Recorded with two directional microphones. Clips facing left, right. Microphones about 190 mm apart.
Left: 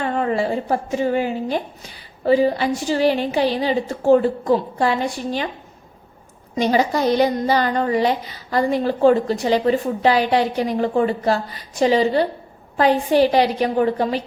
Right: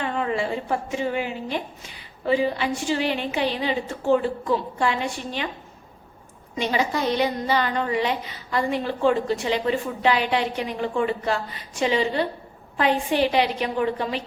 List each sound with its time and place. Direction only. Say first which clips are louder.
0.0 s a woman's voice: left 5 dB; 45° left (ahead or behind)
6.6 s a woman's voice: left 6 dB; 40° left (ahead or behind)